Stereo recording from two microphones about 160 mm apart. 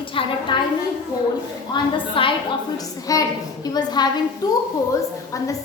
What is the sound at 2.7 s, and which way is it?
A woman's voice, 20° left (ahead or behind).